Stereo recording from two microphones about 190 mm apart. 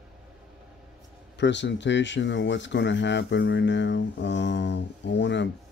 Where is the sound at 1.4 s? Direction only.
70° left (ahead or behind).